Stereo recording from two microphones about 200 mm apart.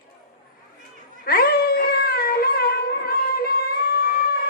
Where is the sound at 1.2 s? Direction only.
50° left (ahead or behind).